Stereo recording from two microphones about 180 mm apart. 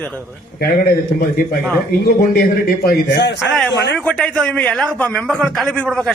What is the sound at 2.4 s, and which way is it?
Speech, 55° left (ahead or behind).